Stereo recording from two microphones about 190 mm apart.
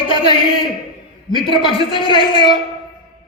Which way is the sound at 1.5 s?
25° left (ahead or behind).